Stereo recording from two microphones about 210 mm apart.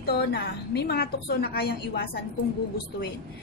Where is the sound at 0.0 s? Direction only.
50° left (ahead or behind).